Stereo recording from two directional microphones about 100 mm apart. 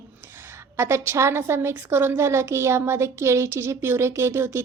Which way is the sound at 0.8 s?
25° right (ahead or behind).